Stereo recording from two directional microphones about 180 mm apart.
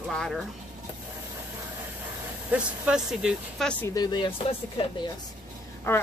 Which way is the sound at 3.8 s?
20° left (ahead or behind).